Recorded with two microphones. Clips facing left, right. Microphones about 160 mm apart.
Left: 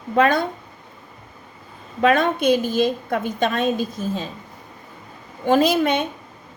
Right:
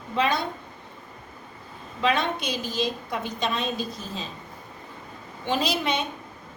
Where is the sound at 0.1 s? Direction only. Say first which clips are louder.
Left 7 dB; 50° left (ahead or behind).